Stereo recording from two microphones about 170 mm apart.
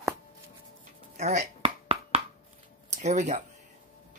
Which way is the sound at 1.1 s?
40° right (ahead or behind).